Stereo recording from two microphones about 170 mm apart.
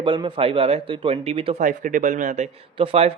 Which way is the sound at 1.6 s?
50° right (ahead or behind).